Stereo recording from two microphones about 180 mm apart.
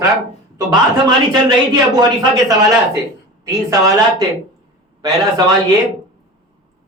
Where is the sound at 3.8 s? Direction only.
20° right (ahead or behind).